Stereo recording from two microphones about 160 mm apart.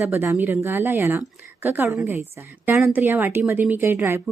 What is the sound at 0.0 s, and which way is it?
A woman's voice, 15° right (ahead or behind).